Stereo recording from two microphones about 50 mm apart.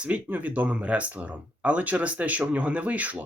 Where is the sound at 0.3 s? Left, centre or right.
Right.